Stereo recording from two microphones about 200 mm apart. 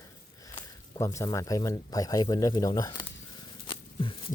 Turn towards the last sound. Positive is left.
turn(degrees=25)  # may be behind; listen again after turning